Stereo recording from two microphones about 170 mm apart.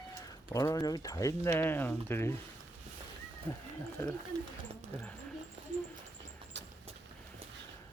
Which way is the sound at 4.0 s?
15° left (ahead or behind).